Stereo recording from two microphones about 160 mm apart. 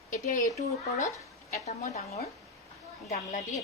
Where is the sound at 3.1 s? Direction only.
45° left (ahead or behind).